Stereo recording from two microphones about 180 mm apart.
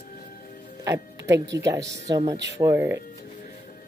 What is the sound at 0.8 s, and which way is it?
Music, 15° right (ahead or behind).